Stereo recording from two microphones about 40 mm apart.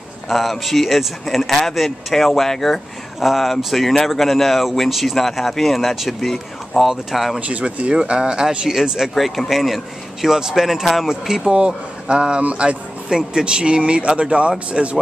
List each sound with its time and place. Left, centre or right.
0.3 s speech: centre
6.9 s speech: centre
7.3 s speech: right
7.9 s speech: right
9.1 s speech: centre
11.5 s speech: right